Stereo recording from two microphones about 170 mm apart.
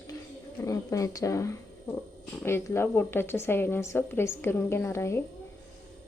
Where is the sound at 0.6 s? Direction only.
20° left (ahead or behind).